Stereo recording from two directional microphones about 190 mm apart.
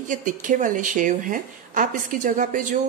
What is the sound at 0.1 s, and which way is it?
Speech, 40° right (ahead or behind).